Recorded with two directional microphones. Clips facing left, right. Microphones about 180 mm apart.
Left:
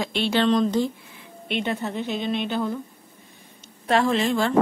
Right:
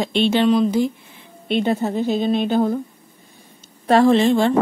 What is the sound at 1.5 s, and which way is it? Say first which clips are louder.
A woman's voice: right 7 dB; 35° right (ahead or behind).